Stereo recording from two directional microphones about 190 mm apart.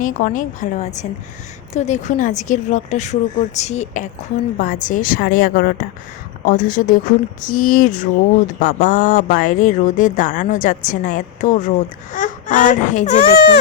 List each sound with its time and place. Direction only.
0.0 s a woman's voice: 45° left (ahead or behind)
13.3 s speech: 60° left (ahead or behind)